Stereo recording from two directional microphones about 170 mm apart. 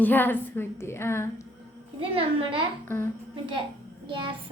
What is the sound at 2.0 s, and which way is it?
Speech, 30° right (ahead or behind).